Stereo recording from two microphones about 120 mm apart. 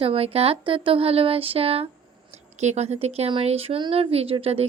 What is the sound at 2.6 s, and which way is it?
Speech, 65° right (ahead or behind).